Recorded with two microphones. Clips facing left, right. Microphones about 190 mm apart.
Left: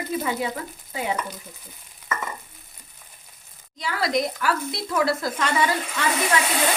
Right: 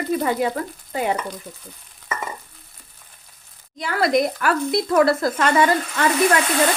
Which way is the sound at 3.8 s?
55° right (ahead or behind).